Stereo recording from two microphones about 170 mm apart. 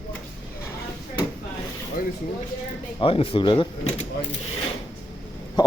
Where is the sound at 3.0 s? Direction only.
30° left (ahead or behind).